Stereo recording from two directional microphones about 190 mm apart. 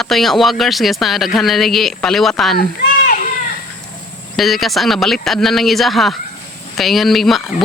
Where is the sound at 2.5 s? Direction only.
50° left (ahead or behind).